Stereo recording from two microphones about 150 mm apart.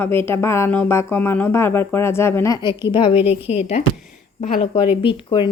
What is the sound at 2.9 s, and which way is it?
Speech, 35° left (ahead or behind).